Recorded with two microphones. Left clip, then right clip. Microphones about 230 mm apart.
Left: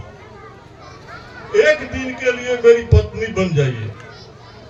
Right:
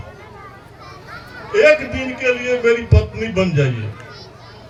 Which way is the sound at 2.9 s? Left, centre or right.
Right.